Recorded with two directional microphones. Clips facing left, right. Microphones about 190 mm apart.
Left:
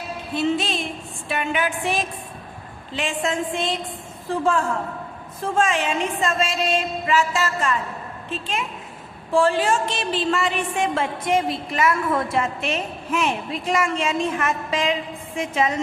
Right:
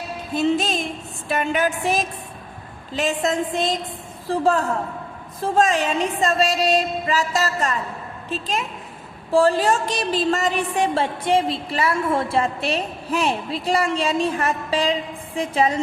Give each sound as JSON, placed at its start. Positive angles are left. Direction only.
{"t": 0.3, "sound": "music", "side_deg": -45}
{"t": 1.3, "sound": "a woman's voice", "side_deg": -40}